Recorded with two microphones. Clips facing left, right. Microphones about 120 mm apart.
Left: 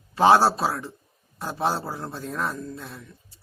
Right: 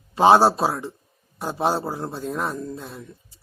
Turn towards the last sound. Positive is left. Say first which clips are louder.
# right 4 dB
turn(degrees=-20)  # may be behind; listen again after turning